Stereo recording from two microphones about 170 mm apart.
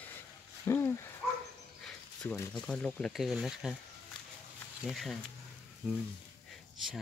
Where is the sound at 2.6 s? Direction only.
5° left (ahead or behind).